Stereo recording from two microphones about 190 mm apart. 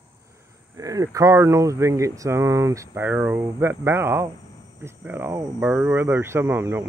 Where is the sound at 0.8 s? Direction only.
20° right (ahead or behind).